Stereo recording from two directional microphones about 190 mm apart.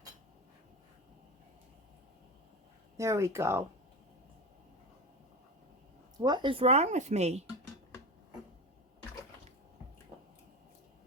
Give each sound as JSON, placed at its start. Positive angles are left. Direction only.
{"t": 3.0, "sound": "speech", "side_deg": -15}
{"t": 6.1, "sound": "speech", "side_deg": -25}